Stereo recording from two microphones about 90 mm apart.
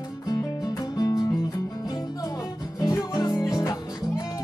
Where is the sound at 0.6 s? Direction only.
45° left (ahead or behind).